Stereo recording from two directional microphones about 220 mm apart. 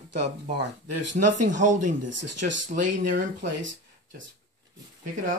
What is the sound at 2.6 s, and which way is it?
Speech, 35° right (ahead or behind).